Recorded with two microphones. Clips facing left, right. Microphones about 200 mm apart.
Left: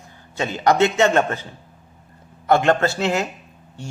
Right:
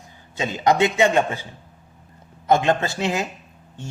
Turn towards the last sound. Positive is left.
turn(degrees=-15)  # may be behind; listen again after turning